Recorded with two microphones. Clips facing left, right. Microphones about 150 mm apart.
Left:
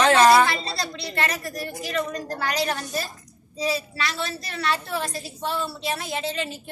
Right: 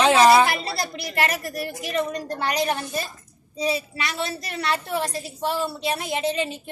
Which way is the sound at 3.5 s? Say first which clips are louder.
Right 1 dB; 25° right (ahead or behind).